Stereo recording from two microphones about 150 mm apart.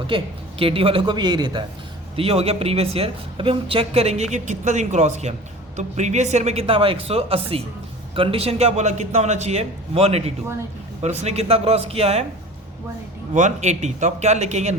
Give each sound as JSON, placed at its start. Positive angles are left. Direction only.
{"t": 0.6, "sound": "speech", "side_deg": -40}
{"t": 2.1, "sound": "speech", "side_deg": -40}
{"t": 13.3, "sound": "speech", "side_deg": -50}